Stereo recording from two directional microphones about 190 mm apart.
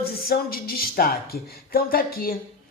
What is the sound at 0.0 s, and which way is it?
Speech, 55° left (ahead or behind).